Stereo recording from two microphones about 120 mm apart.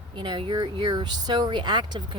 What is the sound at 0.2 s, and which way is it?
Speech, 40° right (ahead or behind).